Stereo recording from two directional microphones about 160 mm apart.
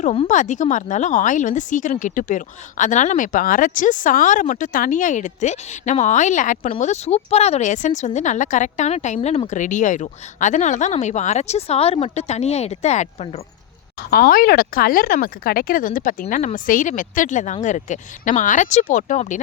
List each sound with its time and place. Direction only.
0.0 s speech: 45° left (ahead or behind)
14.1 s speech: 70° left (ahead or behind)
16.2 s speech: 45° left (ahead or behind)